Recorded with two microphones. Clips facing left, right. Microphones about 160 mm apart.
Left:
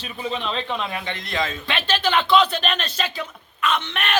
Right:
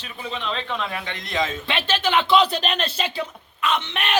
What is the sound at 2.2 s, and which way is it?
Speech, 30° right (ahead or behind).